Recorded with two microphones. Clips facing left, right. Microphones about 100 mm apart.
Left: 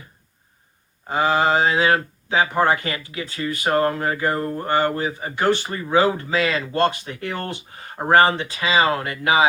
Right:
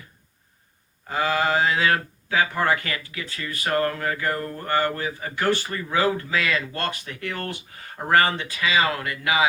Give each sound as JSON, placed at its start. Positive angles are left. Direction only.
{"t": 1.0, "sound": "speech", "side_deg": 25}